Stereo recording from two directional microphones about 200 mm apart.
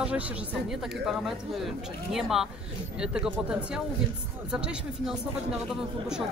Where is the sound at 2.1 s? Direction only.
Centre (ahead or behind).